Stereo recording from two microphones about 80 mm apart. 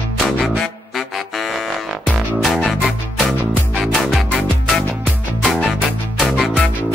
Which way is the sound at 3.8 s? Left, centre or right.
Centre.